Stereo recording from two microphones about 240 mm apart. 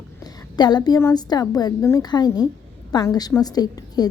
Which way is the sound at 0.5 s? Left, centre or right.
Centre.